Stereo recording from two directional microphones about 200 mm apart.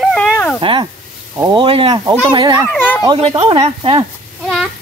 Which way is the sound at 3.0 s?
25° right (ahead or behind).